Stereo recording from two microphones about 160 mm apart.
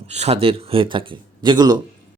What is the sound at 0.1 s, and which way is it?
Speech, 40° right (ahead or behind).